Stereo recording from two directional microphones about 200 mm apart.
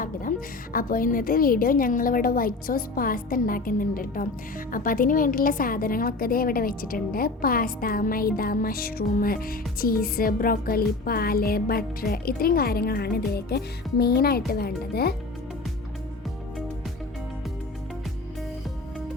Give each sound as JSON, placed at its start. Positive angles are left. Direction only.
{"t": 0.0, "sound": "music", "side_deg": 45}
{"t": 0.7, "sound": "a woman's voice", "side_deg": 45}